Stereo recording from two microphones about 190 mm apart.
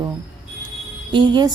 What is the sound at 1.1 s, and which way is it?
Speech, 25° right (ahead or behind).